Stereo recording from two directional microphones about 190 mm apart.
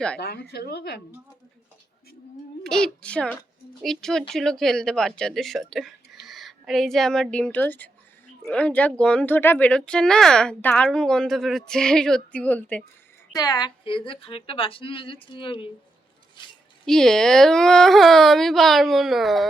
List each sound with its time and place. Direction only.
0.2 s speech: 60° left (ahead or behind)
2.6 s a woman's voice: 5° left (ahead or behind)
13.3 s a woman's voice: 20° left (ahead or behind)
16.8 s speech: centre (ahead or behind)